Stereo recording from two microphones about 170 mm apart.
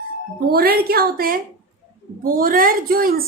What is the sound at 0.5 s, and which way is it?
A woman's voice, 65° right (ahead or behind).